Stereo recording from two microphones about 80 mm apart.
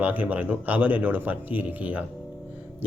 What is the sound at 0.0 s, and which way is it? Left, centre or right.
A man's voice, centre.